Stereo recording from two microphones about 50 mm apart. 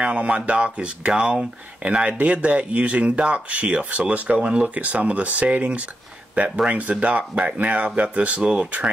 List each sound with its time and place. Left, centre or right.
0.0 s speech: right